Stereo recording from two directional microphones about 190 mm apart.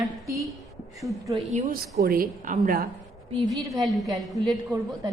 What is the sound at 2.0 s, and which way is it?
Speech, 50° right (ahead or behind).